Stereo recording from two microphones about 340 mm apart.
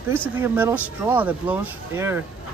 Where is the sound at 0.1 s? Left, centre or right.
Centre.